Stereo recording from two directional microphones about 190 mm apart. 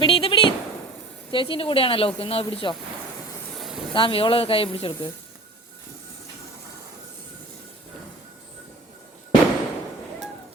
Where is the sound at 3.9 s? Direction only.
25° left (ahead or behind).